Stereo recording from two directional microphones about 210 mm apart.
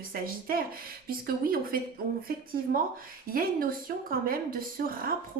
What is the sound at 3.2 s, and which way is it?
A woman's voice, 45° right (ahead or behind).